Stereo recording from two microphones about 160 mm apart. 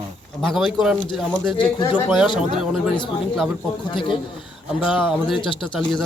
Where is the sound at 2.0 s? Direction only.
5° right (ahead or behind).